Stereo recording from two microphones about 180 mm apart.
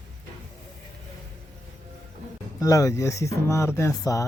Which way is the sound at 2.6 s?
15° left (ahead or behind).